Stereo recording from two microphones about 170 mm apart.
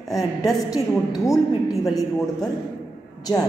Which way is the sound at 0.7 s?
20° left (ahead or behind).